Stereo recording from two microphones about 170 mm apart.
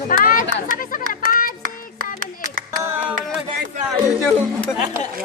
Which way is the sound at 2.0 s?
55° right (ahead or behind).